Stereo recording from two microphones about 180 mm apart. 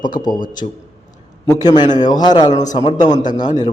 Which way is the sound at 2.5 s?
40° left (ahead or behind).